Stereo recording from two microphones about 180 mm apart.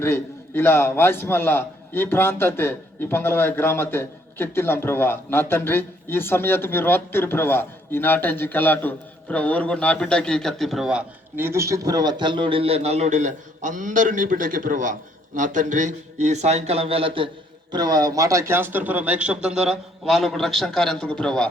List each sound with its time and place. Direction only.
0.0 s a man's voice: 15° left (ahead or behind)